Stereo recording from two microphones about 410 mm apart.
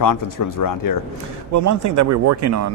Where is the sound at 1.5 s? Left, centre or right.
Right.